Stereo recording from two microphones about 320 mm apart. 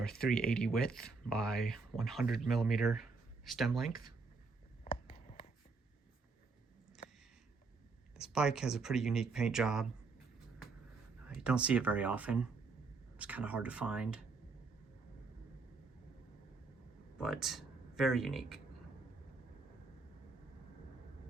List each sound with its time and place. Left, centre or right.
0.0 s speech: centre
4.8 s a sound: left
8.1 s speech: centre
11.3 s speech: centre
17.2 s speech: centre